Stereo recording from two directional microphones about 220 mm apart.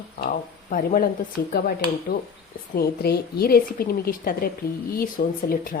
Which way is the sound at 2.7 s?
45° left (ahead or behind).